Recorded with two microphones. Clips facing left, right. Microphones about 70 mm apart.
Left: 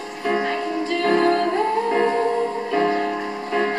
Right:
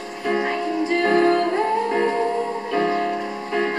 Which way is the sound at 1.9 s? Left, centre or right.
Centre.